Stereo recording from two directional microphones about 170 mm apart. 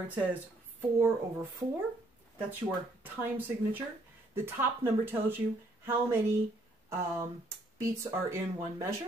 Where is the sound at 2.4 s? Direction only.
10° right (ahead or behind).